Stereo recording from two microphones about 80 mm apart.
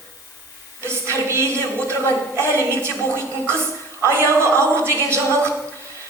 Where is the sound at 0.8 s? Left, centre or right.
Right.